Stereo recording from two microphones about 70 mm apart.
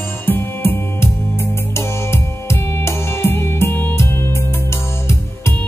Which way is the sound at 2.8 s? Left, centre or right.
Left.